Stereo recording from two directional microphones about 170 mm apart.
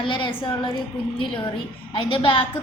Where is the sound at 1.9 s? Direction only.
30° left (ahead or behind).